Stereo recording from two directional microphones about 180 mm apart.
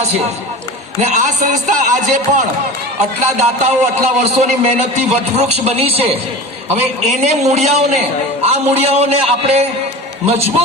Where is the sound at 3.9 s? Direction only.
35° right (ahead or behind).